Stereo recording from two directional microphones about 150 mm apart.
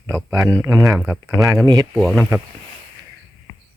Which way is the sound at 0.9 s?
10° right (ahead or behind).